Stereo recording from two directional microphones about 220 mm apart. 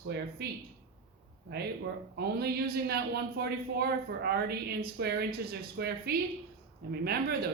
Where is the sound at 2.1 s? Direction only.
45° right (ahead or behind).